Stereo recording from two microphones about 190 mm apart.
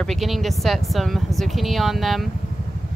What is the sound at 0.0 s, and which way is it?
Speech, centre (ahead or behind).